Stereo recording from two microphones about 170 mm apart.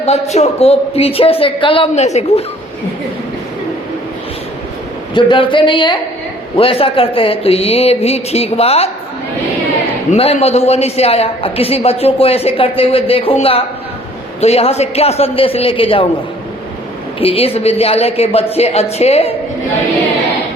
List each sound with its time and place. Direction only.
0.0 s a woman's voice: 40° left (ahead or behind)
5.1 s a woman's voice: 30° left (ahead or behind)
10.1 s a woman's voice: 35° left (ahead or behind)
17.2 s a woman's voice: 35° left (ahead or behind)